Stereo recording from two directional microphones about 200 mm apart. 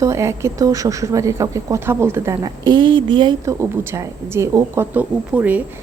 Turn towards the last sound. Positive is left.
turn(degrees=-10)  # may be behind; listen again after turning